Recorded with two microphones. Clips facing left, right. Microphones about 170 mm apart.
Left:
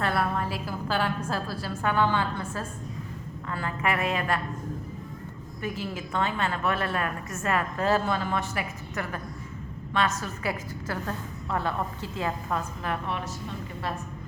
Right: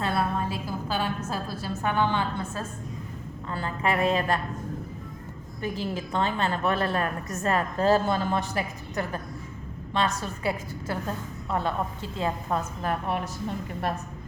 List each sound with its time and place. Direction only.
0.0 s a sound: 20° right (ahead or behind)
1.3 s a woman's voice: 15° right (ahead or behind)
3.5 s a woman's voice: 30° right (ahead or behind)
5.6 s a woman's voice: 35° right (ahead or behind)
12.1 s a woman's voice: 25° right (ahead or behind)
12.8 s a woman's voice: 45° right (ahead or behind)